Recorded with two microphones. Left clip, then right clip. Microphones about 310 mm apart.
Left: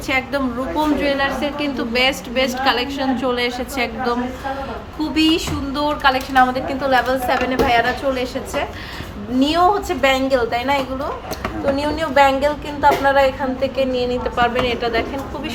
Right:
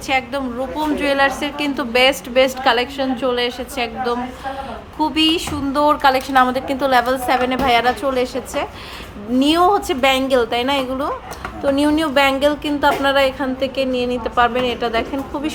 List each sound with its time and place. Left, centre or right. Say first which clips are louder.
0.1 s a woman's voice: even; centre; by 15.0 s right